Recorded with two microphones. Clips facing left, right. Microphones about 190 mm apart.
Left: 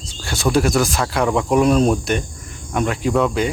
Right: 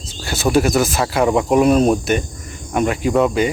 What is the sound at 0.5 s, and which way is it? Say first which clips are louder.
Speech: right 2 dB; 5° right (ahead or behind).